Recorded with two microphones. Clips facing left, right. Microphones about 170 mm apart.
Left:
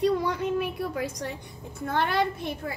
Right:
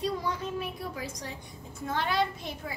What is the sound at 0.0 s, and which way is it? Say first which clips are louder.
A woman's voice: left 7 dB; 65° left (ahead or behind).